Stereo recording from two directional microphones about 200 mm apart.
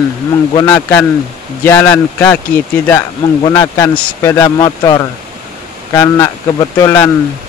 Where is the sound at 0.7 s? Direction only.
10° left (ahead or behind).